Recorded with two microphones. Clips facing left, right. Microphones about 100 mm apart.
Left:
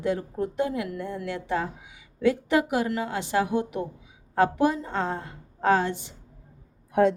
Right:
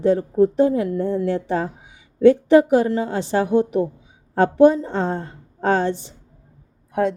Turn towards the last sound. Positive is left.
turn(degrees=0)  # may be behind; listen again after turning